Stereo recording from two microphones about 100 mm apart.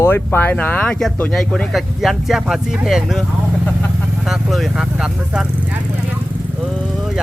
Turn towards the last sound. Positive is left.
turn(degrees=0)  # may be behind; listen again after turning